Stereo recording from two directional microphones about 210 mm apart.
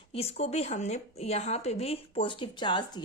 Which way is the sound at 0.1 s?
30° left (ahead or behind).